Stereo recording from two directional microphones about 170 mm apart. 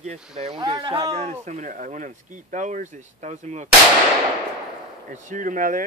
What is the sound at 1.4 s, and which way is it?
Speech, 45° right (ahead or behind).